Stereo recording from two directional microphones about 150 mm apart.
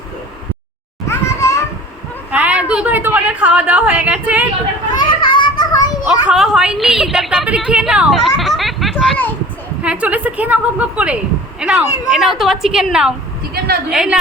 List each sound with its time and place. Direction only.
1.0 s children playing: 20° left (ahead or behind)
2.3 s a woman's voice: 10° right (ahead or behind)
4.9 s children playing: 30° left (ahead or behind)
6.2 s a woman's voice: 5° right (ahead or behind)
9.8 s a woman's voice: 10° right (ahead or behind)